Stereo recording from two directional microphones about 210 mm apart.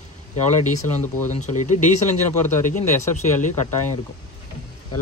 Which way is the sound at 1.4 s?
35° left (ahead or behind).